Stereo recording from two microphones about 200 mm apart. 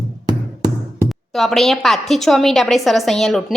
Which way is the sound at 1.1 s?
Centre (ahead or behind).